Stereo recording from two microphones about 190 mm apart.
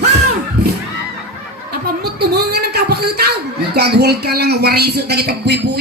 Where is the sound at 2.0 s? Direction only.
55° right (ahead or behind).